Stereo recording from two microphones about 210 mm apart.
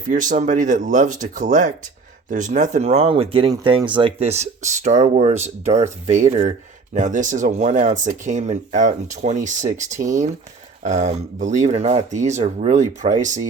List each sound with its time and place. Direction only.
0.1 s speech: 40° right (ahead or behind)